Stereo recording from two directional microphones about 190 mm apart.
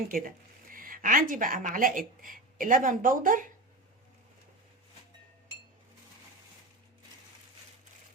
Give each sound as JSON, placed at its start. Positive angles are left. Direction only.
{"t": 0.1, "sound": "speech", "side_deg": -45}